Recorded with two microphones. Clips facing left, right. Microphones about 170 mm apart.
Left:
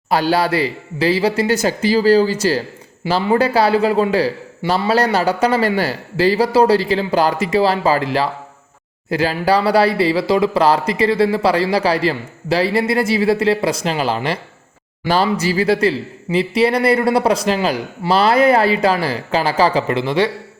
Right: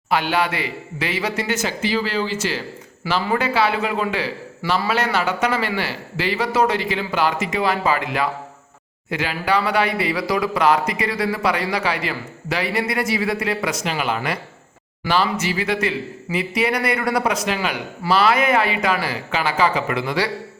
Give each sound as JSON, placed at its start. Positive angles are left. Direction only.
{"t": 0.1, "sound": "speech", "side_deg": 35}